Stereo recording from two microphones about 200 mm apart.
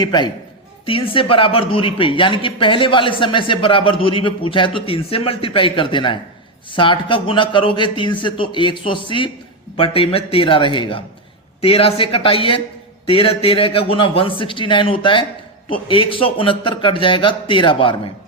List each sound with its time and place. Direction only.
0.0 s speech: 20° left (ahead or behind)